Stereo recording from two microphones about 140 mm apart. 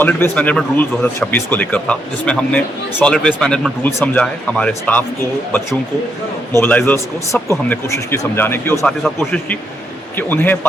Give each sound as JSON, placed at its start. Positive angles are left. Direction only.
{"t": 0.0, "sound": "speech", "side_deg": 10}
{"t": 6.6, "sound": "speech", "side_deg": 10}
{"t": 8.8, "sound": "a man's voice", "side_deg": 0}
{"t": 10.2, "sound": "speech", "side_deg": 15}